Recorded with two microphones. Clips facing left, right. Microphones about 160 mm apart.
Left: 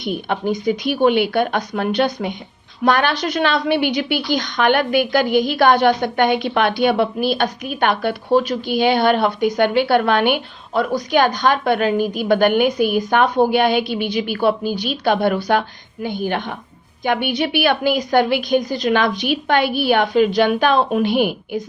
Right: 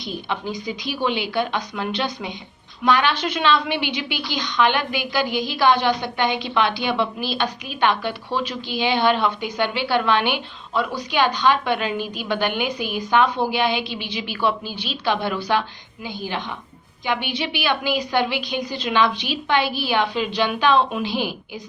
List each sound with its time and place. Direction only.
0.0 s a woman's voice: 55° left (ahead or behind)